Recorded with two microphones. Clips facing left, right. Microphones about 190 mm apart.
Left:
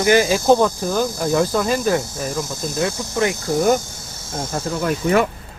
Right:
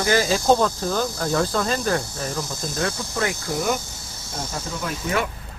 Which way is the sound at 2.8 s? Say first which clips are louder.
Left 5 dB; 20° left (ahead or behind).